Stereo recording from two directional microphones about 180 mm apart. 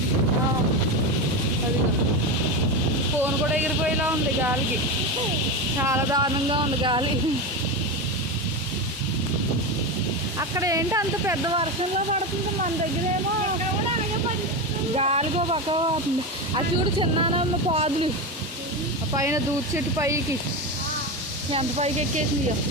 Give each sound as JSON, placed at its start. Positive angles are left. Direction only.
{"t": 3.2, "sound": "speech", "side_deg": -10}
{"t": 5.9, "sound": "speech", "side_deg": -20}
{"t": 10.5, "sound": "speech", "side_deg": -15}
{"t": 14.9, "sound": "speech", "side_deg": -35}
{"t": 19.1, "sound": "speech", "side_deg": -15}
{"t": 21.5, "sound": "speech", "side_deg": -35}